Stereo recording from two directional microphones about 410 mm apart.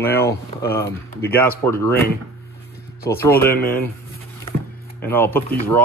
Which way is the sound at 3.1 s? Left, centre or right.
Centre.